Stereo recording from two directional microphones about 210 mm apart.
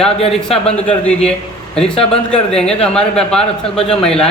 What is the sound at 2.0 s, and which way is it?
Speech, 5° left (ahead or behind).